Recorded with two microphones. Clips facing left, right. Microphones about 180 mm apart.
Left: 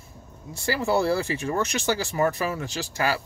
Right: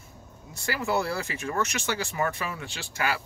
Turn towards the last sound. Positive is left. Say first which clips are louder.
# left 4 dB
turn(degrees=35)  # may be behind; listen again after turning